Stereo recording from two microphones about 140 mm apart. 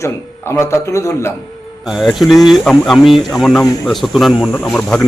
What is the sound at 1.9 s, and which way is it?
Speech, 5° right (ahead or behind).